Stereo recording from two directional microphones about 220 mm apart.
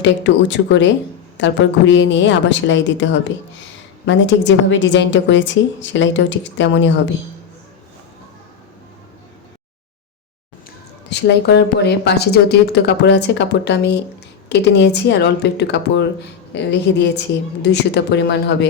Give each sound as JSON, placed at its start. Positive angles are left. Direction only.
{"t": 0.0, "sound": "a woman's voice", "side_deg": 55}
{"t": 11.1, "sound": "speech", "side_deg": 50}